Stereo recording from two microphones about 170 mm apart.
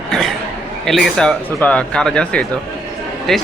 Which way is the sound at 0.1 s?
Centre (ahead or behind).